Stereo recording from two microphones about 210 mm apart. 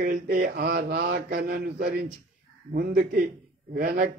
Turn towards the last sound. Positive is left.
turn(degrees=-45)  # may be behind; listen again after turning